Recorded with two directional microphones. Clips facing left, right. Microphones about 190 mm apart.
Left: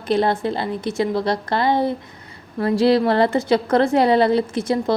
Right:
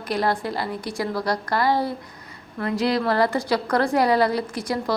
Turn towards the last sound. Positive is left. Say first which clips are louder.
# left 5 dB
turn(degrees=25)  # may be behind; listen again after turning